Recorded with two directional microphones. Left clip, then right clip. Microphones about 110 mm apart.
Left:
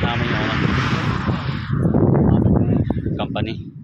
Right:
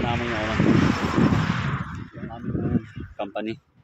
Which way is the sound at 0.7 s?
15° left (ahead or behind).